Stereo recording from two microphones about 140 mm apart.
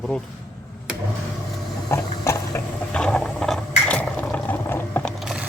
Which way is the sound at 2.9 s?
5° left (ahead or behind).